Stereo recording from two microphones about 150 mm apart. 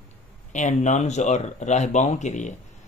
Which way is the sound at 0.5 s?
55° left (ahead or behind).